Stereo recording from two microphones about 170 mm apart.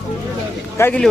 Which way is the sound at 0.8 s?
5° left (ahead or behind).